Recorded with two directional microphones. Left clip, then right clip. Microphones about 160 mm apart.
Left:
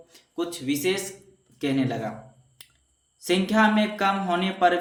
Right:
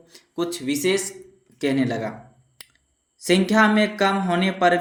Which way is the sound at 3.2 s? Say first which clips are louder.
Right 4 dB; 30° right (ahead or behind).